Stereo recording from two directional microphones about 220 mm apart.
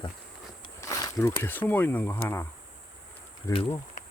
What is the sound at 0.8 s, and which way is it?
Speech, 15° left (ahead or behind).